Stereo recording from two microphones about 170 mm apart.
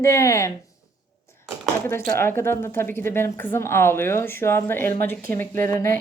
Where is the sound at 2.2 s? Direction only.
15° left (ahead or behind).